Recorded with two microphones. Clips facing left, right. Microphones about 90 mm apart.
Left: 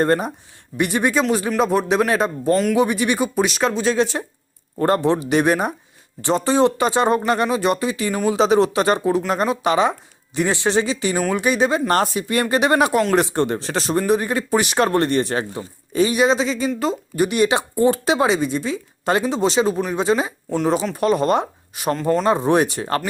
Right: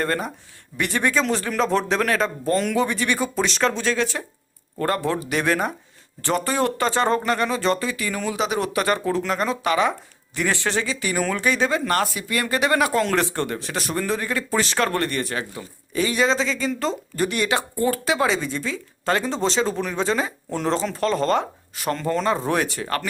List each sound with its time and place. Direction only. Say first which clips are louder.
0.0 s speech: left 6 dB; 20° left (ahead or behind)
3.9 s speech: left 5 dB; 20° left (ahead or behind)
11.9 s speech: left 4 dB; 30° left (ahead or behind)
20.5 s speech: left 6 dB; centre (ahead or behind)
20.9 s speech: left 3 dB; 15° left (ahead or behind)